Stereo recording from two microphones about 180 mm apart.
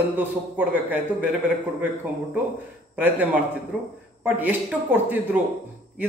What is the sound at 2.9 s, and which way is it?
A man's voice, 10° right (ahead or behind).